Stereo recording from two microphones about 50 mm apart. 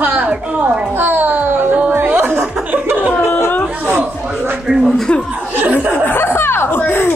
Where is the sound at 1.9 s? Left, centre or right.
Right.